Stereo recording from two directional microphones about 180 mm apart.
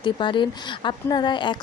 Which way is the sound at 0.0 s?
25° left (ahead or behind).